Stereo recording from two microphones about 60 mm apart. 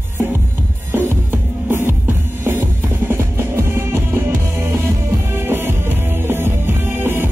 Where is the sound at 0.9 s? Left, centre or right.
Right.